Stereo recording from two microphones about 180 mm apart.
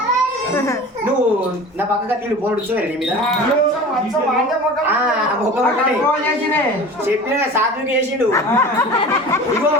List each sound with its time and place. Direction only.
8.3 s speech: 15° left (ahead or behind)